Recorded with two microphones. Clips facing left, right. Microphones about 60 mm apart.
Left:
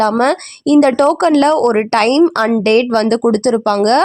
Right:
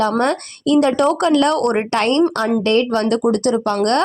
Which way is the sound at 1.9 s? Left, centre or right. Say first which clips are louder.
Left 5 dB; left.